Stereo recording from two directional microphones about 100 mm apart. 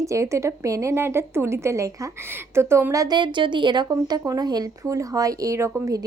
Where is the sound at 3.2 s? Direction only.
55° right (ahead or behind).